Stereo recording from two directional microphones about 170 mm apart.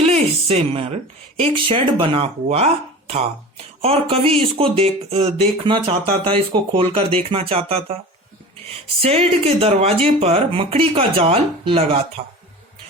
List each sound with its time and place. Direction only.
0.0 s a sound: 35° right (ahead or behind)
1.4 s speech: 30° right (ahead or behind)
3.8 s speech: 35° right (ahead or behind)
9.0 s speech: 35° right (ahead or behind)